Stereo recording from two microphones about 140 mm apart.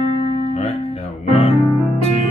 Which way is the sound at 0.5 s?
50° left (ahead or behind).